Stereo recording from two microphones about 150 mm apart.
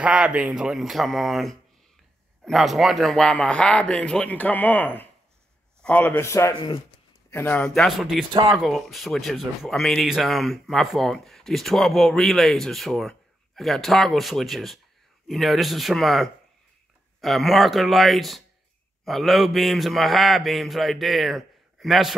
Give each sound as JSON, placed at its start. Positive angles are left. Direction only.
{"t": 0.0, "sound": "a man's voice", "side_deg": -10}
{"t": 8.3, "sound": "speech", "side_deg": -30}
{"t": 8.5, "sound": "speech", "side_deg": 0}